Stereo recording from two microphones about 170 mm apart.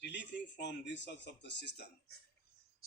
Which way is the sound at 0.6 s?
90° left.